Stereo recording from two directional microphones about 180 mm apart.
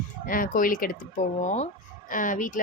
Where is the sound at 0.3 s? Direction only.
50° left (ahead or behind).